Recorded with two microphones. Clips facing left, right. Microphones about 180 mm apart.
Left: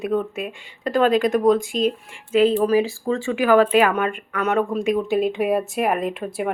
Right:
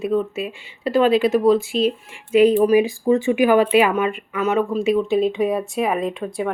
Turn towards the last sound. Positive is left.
turn(degrees=5)  # may be behind; listen again after turning